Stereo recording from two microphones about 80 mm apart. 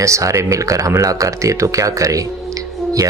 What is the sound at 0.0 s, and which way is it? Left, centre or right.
Speech, right.